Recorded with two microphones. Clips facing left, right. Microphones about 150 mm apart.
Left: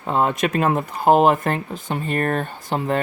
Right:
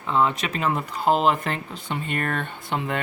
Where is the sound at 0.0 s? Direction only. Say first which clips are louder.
Left 3 dB; 50° left (ahead or behind).